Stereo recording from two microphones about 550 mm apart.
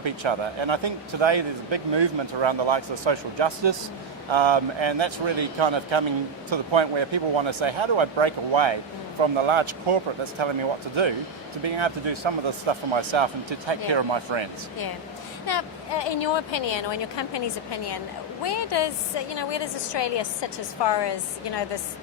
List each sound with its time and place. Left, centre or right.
0.0 s speech: right
15.4 s speech: left